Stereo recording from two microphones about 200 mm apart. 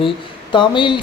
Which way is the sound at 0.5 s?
25° left (ahead or behind).